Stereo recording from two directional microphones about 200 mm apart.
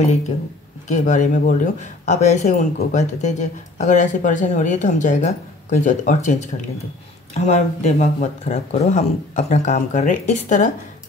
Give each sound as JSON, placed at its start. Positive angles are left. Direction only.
{"t": 0.8, "sound": "speech", "side_deg": 40}